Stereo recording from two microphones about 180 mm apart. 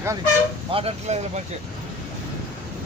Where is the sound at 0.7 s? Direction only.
30° right (ahead or behind).